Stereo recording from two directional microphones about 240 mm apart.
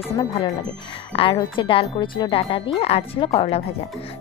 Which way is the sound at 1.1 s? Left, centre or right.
Centre.